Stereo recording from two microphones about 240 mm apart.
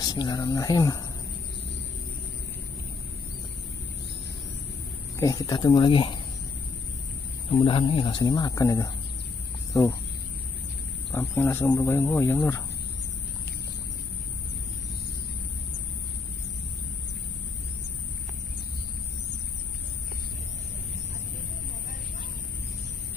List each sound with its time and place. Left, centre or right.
0.0 s speech: centre
5.1 s speech: centre
7.5 s speech: left
11.1 s speech: centre